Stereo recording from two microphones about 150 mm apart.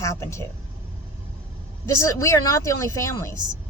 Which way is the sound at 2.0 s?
20° left (ahead or behind).